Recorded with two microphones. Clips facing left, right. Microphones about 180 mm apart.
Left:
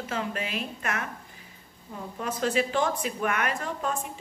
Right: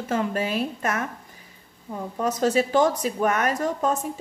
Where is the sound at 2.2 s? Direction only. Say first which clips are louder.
Right 5 dB; 40° right (ahead or behind).